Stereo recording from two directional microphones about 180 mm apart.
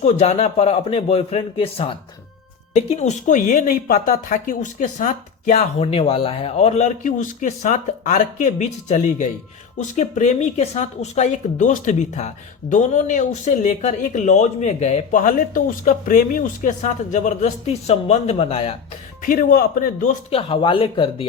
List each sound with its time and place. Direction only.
0.0 s a woman's voice: 40° left (ahead or behind)
19.2 s a woman's voice: 50° left (ahead or behind)
20.3 s speech: 30° left (ahead or behind)